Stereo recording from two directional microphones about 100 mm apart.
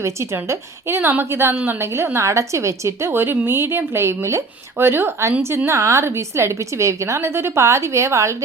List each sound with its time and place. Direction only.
0.0 s a woman's voice: 25° right (ahead or behind)